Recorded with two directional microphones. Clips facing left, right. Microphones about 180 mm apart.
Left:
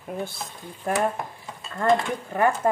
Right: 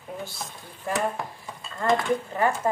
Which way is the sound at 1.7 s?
50° left (ahead or behind).